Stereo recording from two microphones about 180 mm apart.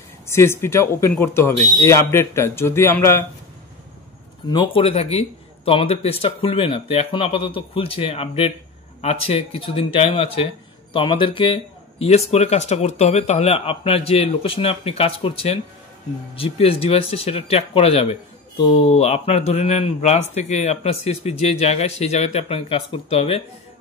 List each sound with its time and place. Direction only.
0.3 s speech: 15° left (ahead or behind)
4.5 s speech: 25° left (ahead or behind)